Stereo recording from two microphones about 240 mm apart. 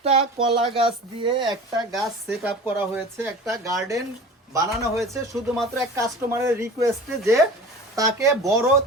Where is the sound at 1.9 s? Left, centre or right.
Centre.